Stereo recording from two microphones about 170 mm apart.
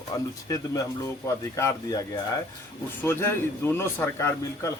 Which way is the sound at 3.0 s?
15° left (ahead or behind).